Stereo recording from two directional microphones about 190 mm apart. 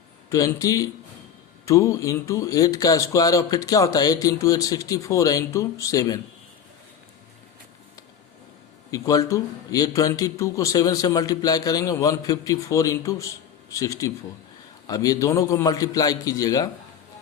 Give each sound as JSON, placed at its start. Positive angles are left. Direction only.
{"t": 0.3, "sound": "a man's voice", "side_deg": 15}
{"t": 8.9, "sound": "a man's voice", "side_deg": 20}